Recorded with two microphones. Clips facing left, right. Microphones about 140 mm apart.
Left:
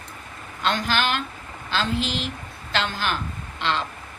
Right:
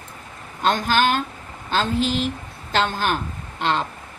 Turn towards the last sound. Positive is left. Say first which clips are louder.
# right 3 dB
turn(degrees=-45)  # may be behind; listen again after turning